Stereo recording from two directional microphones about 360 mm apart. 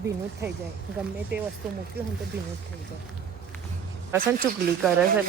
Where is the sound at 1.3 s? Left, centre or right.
Right.